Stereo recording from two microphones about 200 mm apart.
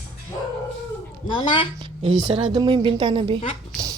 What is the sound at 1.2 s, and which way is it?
Speech, 25° left (ahead or behind).